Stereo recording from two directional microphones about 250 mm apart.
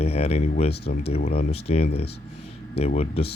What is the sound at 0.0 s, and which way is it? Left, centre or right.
Speech, left.